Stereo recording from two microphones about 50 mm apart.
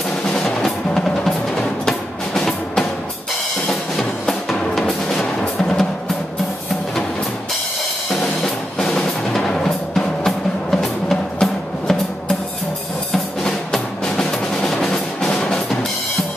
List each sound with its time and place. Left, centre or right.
0.4 s music: centre
3.9 s music: centre
8.7 s music: centre